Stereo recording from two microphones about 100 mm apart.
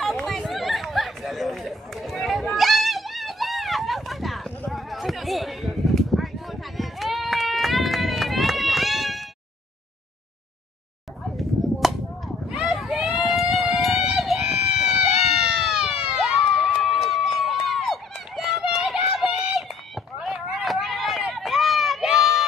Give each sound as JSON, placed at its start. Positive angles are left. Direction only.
{"t": 0.0, "sound": "chatter", "side_deg": 0}
{"t": 6.8, "sound": "run", "side_deg": 0}
{"t": 11.8, "sound": "a sound", "side_deg": 0}
{"t": 12.4, "sound": "run", "side_deg": 0}